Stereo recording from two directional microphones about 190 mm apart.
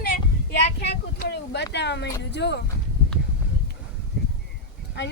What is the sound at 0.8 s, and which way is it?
A woman's voice, 60° left (ahead or behind).